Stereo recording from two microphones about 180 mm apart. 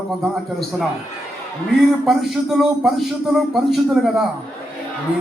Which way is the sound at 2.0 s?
Centre (ahead or behind).